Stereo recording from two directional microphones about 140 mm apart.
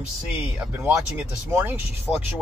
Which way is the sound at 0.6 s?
15° right (ahead or behind).